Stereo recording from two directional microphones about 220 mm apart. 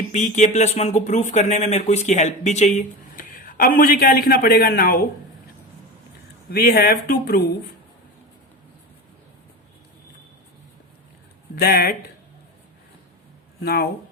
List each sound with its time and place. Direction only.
0.1 s speech: 30° left (ahead or behind)
6.5 s speech: 40° left (ahead or behind)
11.5 s speech: 40° left (ahead or behind)